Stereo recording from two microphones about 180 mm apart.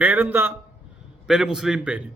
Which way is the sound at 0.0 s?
10° right (ahead or behind).